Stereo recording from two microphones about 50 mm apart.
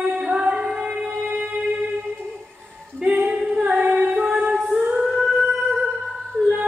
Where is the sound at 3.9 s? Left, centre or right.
Right.